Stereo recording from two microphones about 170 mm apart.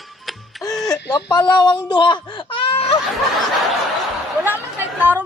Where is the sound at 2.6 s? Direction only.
35° left (ahead or behind).